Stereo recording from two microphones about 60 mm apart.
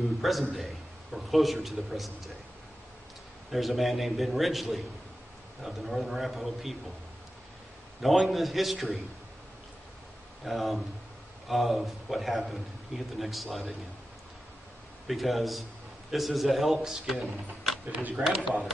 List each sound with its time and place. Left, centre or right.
0.2 s a man's voice: centre
3.5 s a man's voice: centre
8.0 s a man's voice: centre
10.4 s a man's voice: centre
15.0 s a man's voice: centre
18.2 s speech: right